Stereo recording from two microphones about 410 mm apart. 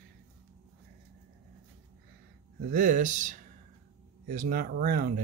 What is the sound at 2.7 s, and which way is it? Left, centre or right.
Speech, centre.